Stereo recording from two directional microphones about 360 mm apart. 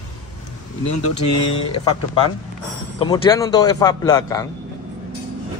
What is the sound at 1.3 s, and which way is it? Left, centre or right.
Speech, centre.